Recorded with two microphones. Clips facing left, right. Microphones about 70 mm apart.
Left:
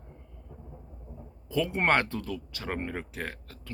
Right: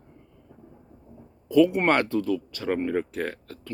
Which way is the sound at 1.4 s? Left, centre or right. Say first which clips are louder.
Right 8 dB; left.